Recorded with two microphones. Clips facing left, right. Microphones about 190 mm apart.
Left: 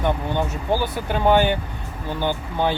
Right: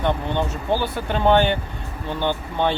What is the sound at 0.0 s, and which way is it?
Speech, 10° left (ahead or behind).